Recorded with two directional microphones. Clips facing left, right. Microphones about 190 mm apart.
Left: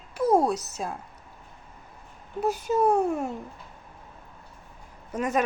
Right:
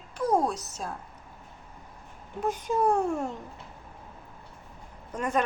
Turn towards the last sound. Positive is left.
turn(degrees=10)  # may be behind; listen again after turning